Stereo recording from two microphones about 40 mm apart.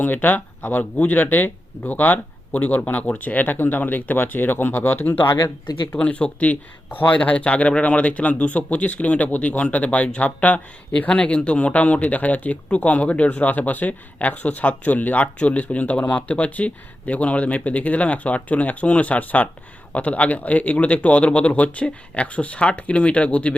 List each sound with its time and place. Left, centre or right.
0.0 s speech: left
6.0 s speech: left
7.2 s speech: left